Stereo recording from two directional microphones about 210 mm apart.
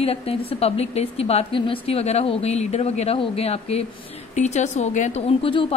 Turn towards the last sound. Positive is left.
turn(degrees=25)  # may be behind; listen again after turning